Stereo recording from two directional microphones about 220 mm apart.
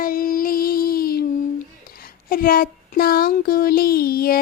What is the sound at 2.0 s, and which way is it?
Speech, 40° left (ahead or behind).